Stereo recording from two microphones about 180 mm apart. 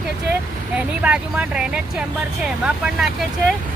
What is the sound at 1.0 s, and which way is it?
Speech, 5° right (ahead or behind).